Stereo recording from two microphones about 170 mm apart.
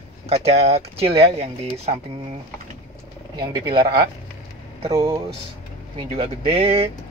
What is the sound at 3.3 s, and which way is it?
Speech, 25° right (ahead or behind).